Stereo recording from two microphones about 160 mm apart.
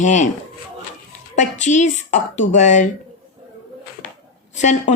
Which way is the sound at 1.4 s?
50° left (ahead or behind).